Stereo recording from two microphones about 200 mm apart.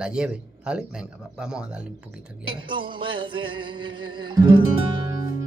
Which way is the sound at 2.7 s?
25° right (ahead or behind).